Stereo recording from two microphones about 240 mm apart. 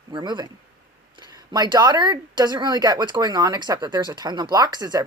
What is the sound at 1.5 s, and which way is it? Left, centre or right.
Speech, centre.